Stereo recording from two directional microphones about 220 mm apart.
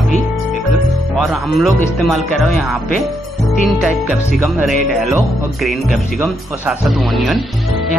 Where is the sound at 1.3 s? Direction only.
Centre (ahead or behind).